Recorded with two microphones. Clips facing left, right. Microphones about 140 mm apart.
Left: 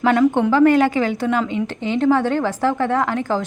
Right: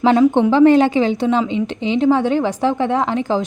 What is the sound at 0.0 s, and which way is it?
A woman's voice, 25° right (ahead or behind).